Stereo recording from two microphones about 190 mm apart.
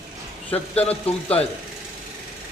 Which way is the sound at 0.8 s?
30° left (ahead or behind).